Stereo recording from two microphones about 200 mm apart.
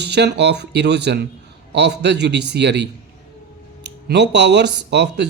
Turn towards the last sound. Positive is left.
turn(degrees=-60)  # may be behind; listen again after turning